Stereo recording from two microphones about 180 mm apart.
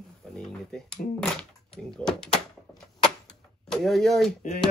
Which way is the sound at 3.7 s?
Centre (ahead or behind).